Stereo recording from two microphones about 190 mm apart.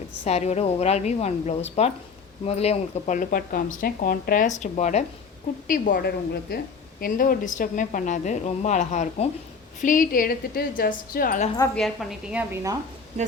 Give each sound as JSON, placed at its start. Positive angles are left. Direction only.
{"t": 0.3, "sound": "a woman's voice", "side_deg": 35}
{"t": 11.7, "sound": "a woman's voice", "side_deg": 0}